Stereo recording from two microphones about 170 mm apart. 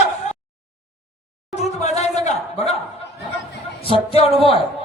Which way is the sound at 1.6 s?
40° left (ahead or behind).